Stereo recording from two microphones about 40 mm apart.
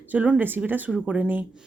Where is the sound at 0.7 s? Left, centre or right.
Right.